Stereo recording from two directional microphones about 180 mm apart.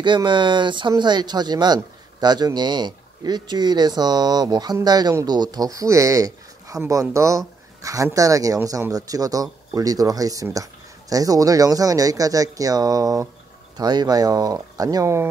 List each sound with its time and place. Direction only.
0.0 s speech: 25° right (ahead or behind)